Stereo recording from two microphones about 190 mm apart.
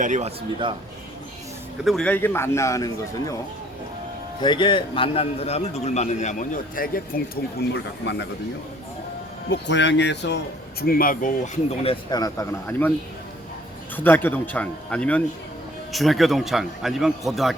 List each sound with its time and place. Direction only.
0.0 s a man's voice: 40° right (ahead or behind)
1.8 s a man's voice: centre (ahead or behind); by 3.3 s 15° left (ahead or behind)
4.4 s a man's voice: 25° left (ahead or behind); by 7.2 s 50° left (ahead or behind)
7.7 s speech: 65° left (ahead or behind)
9.5 s speech: 70° left (ahead or behind); by 11.6 s 45° left (ahead or behind)
11.8 s speech: 25° left (ahead or behind)
13.9 s a man's voice: 10° left (ahead or behind)